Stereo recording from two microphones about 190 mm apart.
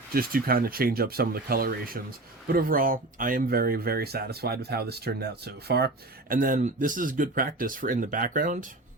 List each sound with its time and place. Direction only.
0.1 s speech: 50° right (ahead or behind)